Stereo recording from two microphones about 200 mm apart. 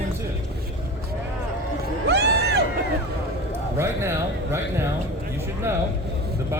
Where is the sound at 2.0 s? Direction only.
55° right (ahead or behind).